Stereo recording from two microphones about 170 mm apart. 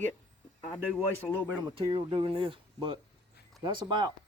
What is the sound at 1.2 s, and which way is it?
Speech, 5° left (ahead or behind).